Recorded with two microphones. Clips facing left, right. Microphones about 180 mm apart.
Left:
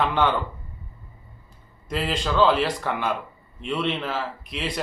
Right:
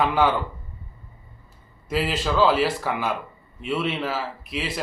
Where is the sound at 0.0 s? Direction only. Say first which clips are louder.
Right 2 dB; 5° right (ahead or behind).